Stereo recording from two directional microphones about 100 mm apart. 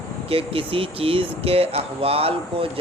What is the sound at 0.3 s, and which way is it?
Speech, 70° right (ahead or behind).